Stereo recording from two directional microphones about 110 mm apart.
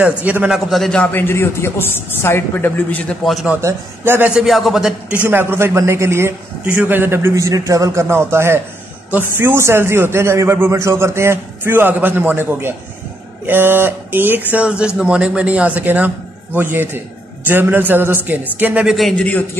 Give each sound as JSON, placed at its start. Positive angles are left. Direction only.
{"t": 0.0, "sound": "a man's voice", "side_deg": -15}
{"t": 0.5, "sound": "speech", "side_deg": 0}
{"t": 3.6, "sound": "a man's voice", "side_deg": -20}
{"t": 4.3, "sound": "speech", "side_deg": -5}
{"t": 5.2, "sound": "a man's voice", "side_deg": -20}
{"t": 19.1, "sound": "speech", "side_deg": 15}